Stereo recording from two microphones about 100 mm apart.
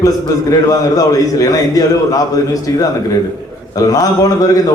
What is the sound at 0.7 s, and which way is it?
A man's voice, 35° left (ahead or behind).